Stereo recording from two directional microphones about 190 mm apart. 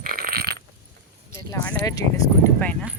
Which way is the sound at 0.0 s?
50° right (ahead or behind).